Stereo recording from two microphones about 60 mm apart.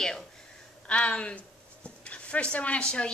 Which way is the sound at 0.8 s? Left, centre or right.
Centre.